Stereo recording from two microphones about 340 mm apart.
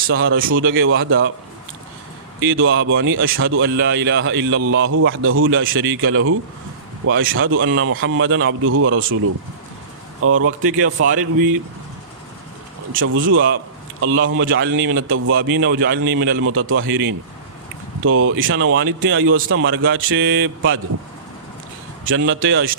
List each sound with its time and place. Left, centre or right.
0.1 s a man's voice: right
2.4 s a man's voice: right
12.9 s a man's voice: right
22.0 s a man's voice: right